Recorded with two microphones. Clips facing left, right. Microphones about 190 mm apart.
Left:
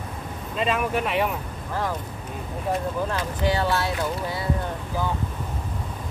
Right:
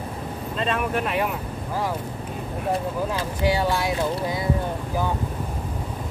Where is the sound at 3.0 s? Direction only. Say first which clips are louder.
Right 1 dB; 10° right (ahead or behind).